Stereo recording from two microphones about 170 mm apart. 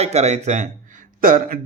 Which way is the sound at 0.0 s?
40° right (ahead or behind).